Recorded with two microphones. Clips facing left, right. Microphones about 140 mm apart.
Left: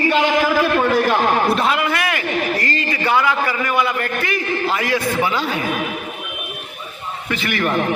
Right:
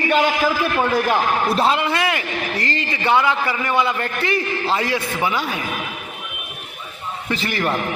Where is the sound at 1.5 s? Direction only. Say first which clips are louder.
Even; 30° right (ahead or behind).